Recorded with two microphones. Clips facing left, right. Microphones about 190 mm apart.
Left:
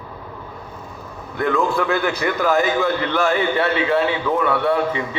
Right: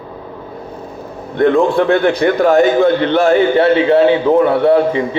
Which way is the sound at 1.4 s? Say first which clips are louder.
Right 8 dB; 30° right (ahead or behind).